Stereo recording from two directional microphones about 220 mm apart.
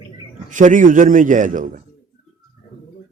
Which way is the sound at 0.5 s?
35° right (ahead or behind).